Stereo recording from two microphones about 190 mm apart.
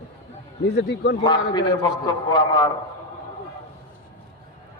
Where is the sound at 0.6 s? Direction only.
60° left (ahead or behind).